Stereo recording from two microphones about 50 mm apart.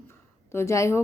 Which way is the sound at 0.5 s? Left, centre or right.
Left.